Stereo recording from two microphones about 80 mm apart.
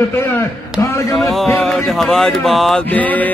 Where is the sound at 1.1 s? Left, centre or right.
Centre.